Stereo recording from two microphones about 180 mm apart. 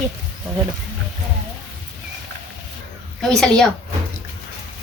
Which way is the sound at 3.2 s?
5° left (ahead or behind).